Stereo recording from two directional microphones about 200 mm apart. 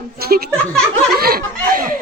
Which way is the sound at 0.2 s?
50° right (ahead or behind).